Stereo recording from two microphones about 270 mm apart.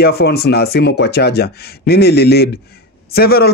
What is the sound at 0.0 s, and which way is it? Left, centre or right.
A man's voice, left.